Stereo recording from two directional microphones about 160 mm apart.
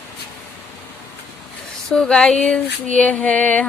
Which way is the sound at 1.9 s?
5° left (ahead or behind).